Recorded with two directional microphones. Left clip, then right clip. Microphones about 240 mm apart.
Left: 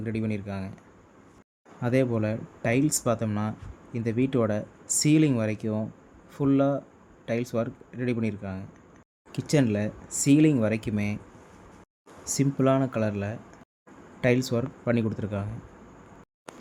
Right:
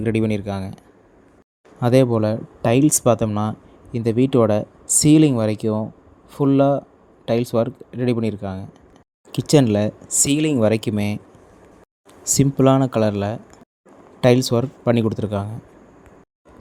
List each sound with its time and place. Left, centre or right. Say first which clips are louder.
0.0 s speech: right 11 dB; right
1.8 s speech: right 9 dB; right
12.2 s speech: right 8 dB; right